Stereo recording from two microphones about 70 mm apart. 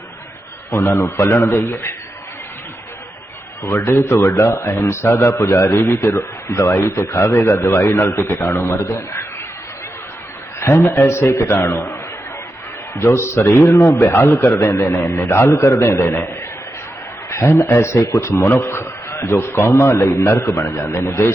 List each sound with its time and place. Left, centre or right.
0.7 s a man's voice: left
3.6 s a man's voice: left
10.6 s a man's voice: left
13.0 s a man's voice: left
17.2 s a man's voice: left
18.0 s a man's voice: left